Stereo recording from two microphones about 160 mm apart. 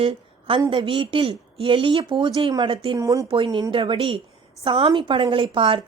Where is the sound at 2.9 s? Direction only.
20° right (ahead or behind).